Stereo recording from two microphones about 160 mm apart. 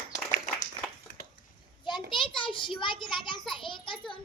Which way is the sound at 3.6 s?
30° left (ahead or behind).